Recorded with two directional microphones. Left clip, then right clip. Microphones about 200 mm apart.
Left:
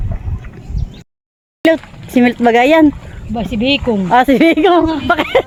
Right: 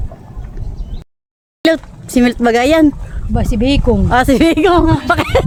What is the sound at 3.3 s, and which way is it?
Speech, 30° right (ahead or behind).